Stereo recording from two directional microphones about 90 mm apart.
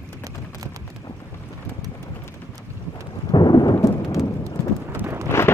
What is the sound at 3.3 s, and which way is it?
Thunder, 55° left (ahead or behind).